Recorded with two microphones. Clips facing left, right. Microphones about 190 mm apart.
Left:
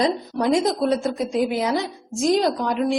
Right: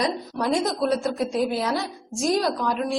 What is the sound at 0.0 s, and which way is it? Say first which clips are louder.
Speech: left 4 dB; centre (ahead or behind).